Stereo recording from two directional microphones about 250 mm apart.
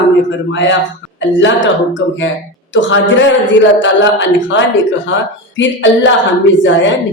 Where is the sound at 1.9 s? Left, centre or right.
Left.